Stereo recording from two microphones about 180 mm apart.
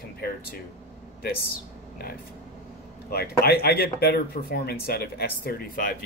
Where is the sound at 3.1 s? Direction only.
60° left (ahead or behind).